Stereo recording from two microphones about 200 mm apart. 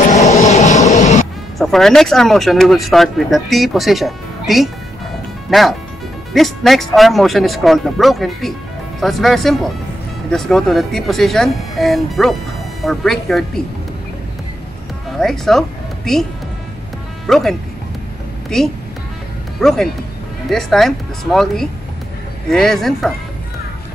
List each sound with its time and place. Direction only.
0.1 s vehicle: 35° left (ahead or behind)
1.6 s speech: centre (ahead or behind)
15.1 s speech: centre (ahead or behind)
17.3 s speech: centre (ahead or behind)